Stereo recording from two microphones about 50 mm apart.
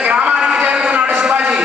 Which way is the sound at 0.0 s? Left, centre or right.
Right.